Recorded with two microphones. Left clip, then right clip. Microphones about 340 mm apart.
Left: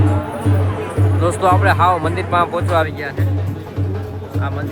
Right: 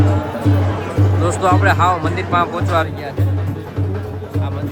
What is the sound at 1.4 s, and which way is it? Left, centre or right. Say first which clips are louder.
Speech: left 1 dB; centre.